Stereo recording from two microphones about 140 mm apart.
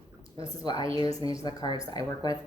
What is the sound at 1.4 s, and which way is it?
Speech, 30° left (ahead or behind).